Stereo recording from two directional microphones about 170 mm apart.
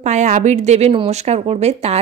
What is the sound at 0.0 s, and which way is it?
A woman's voice, 45° right (ahead or behind).